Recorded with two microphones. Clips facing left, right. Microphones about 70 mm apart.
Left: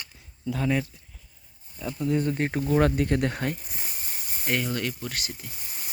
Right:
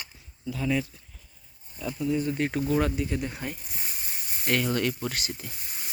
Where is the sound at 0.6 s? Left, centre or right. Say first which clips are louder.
Left 1 dB; left.